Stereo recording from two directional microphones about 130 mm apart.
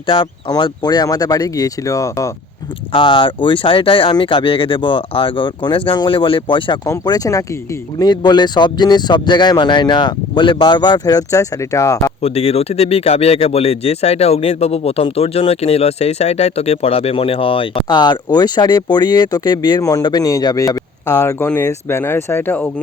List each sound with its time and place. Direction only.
0.1 s speech: 35° left (ahead or behind)
2.9 s speech: 40° left (ahead or behind)
6.8 s speech: 25° left (ahead or behind)
12.2 s speech: 50° left (ahead or behind); by 22.7 s 10° left (ahead or behind)